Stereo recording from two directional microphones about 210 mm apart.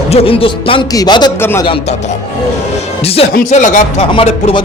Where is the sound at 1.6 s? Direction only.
25° left (ahead or behind).